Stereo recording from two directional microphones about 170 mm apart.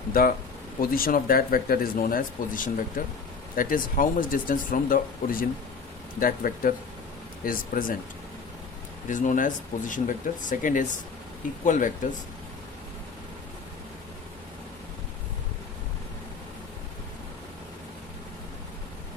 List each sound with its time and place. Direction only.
0.1 s speech: 60° left (ahead or behind)
9.0 s speech: 50° left (ahead or behind)